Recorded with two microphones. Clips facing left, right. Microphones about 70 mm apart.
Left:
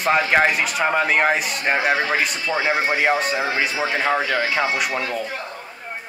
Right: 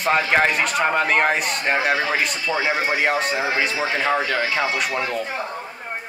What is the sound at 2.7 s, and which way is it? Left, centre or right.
Speech, centre.